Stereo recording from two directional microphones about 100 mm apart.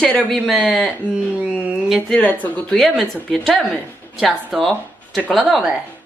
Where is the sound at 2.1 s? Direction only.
15° left (ahead or behind).